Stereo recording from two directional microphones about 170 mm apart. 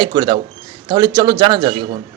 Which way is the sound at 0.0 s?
25° right (ahead or behind).